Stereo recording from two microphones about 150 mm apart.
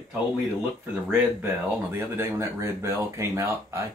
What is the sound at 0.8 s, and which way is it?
Speech, 10° right (ahead or behind).